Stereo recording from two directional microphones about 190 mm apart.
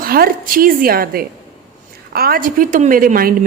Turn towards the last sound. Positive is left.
turn(degrees=-50)  # may be behind; listen again after turning